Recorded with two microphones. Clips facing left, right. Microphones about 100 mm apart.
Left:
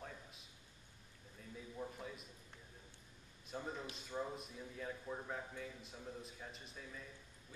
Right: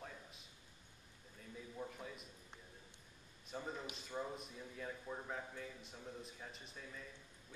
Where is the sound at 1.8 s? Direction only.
Centre (ahead or behind).